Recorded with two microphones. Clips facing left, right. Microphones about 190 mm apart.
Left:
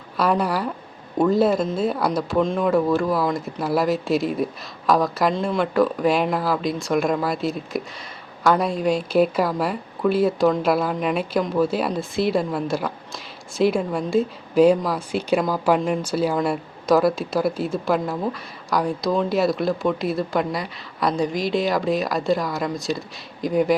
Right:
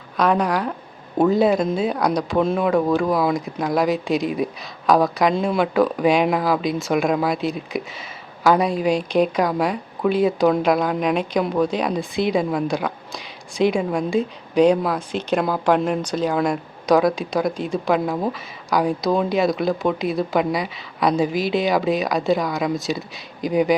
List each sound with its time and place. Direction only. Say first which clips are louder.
0.2 s speech: right 2 dB; 5° left (ahead or behind)
2.4 s speech: even; 10° right (ahead or behind)